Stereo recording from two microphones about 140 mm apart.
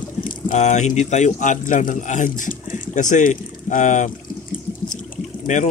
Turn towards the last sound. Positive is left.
turn(degrees=60)  # may be behind; listen again after turning